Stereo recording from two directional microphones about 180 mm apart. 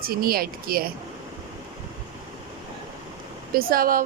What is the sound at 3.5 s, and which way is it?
Speech, 55° right (ahead or behind).